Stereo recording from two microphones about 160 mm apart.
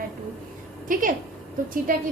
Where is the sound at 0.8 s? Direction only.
60° right (ahead or behind).